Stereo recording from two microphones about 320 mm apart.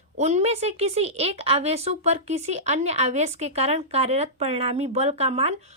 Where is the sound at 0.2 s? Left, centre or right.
Right.